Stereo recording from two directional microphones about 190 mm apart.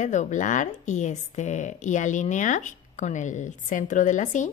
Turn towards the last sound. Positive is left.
turn(degrees=40)  # may be behind; listen again after turning